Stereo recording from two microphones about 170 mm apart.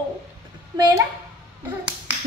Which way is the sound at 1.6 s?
10° right (ahead or behind).